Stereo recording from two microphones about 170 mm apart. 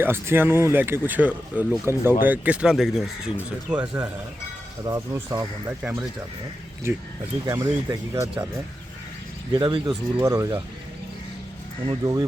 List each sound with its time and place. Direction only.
0.0 s speech: 15° right (ahead or behind)
4.9 s speech: 20° right (ahead or behind)
5.8 s speech: 10° right (ahead or behind)
7.4 s speech: 20° right (ahead or behind)
9.6 s speech: 25° right (ahead or behind)
10.2 s speech: 15° right (ahead or behind)
11.9 s speech: 20° right (ahead or behind)